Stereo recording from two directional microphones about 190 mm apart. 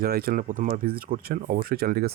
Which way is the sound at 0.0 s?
55° right (ahead or behind).